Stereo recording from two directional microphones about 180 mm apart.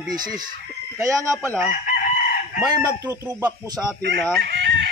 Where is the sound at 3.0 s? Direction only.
20° right (ahead or behind).